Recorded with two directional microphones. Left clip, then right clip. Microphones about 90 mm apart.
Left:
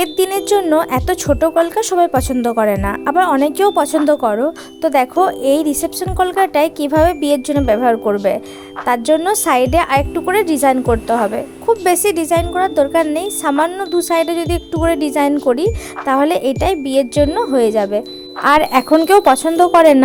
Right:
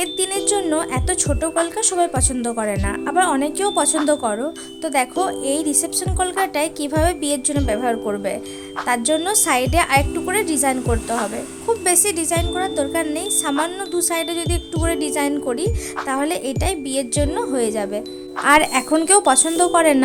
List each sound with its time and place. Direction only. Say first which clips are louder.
0.0 s a woman's voice: left 6 dB; 50° left (ahead or behind); by 4.9 s 35° left (ahead or behind)
4.9 s a woman's voice: left 7 dB; 45° left (ahead or behind)
10.8 s a woman's voice: left 7 dB; 35° left (ahead or behind)
13.5 s a woman's voice: left 8 dB; 35° left (ahead or behind)